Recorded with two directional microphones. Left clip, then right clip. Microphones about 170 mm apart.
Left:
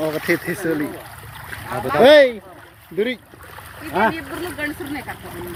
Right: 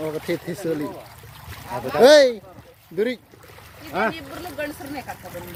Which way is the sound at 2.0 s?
20° right (ahead or behind).